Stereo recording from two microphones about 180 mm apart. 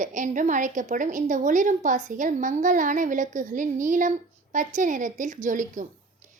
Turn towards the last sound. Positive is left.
turn(degrees=-45)  # may be behind; listen again after turning